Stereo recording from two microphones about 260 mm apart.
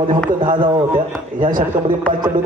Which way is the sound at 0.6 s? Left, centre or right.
Centre.